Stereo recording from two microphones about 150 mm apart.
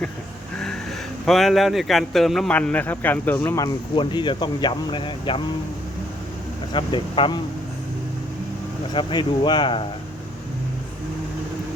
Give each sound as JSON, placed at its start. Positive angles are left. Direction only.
{"t": 0.6, "sound": "speech", "side_deg": 5}
{"t": 6.7, "sound": "speech", "side_deg": 30}
{"t": 8.9, "sound": "speech", "side_deg": 30}